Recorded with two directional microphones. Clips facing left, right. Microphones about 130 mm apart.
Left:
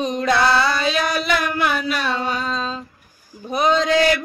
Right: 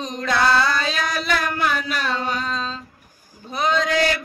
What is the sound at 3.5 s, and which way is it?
Male singing, 15° left (ahead or behind).